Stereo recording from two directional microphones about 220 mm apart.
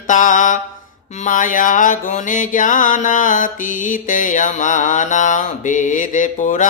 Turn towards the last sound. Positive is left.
turn(degrees=35)  # may be behind; listen again after turning